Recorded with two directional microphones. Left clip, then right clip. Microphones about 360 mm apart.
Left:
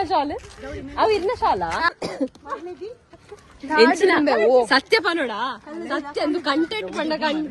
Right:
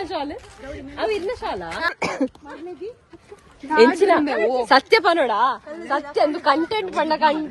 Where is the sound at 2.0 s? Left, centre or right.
Right.